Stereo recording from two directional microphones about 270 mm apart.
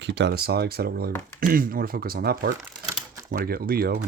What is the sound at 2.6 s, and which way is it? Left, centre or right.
Crumpling, centre.